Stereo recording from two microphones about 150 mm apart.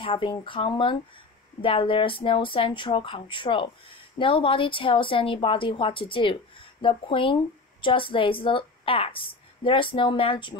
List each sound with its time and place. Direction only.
0.0 s speech: 35° left (ahead or behind)